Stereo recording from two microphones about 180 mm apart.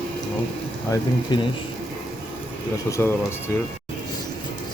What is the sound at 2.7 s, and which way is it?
Speech, 15° left (ahead or behind).